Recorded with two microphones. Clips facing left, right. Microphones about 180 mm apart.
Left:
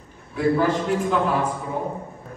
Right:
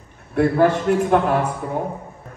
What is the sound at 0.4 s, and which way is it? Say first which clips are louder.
A woman's voice: right 4 dB; 60° right (ahead or behind).